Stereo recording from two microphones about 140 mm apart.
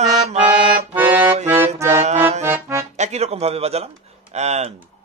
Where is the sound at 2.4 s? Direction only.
20° right (ahead or behind).